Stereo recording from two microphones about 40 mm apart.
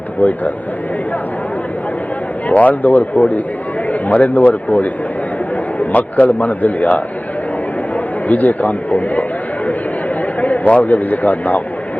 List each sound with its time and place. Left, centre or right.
0.2 s a man's voice: left
2.5 s a man's voice: left
8.3 s a man's voice: left
10.4 s a sound: left
10.8 s a man's voice: left